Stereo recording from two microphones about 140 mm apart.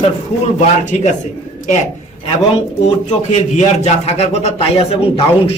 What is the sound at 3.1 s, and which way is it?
A man's voice, 55° left (ahead or behind).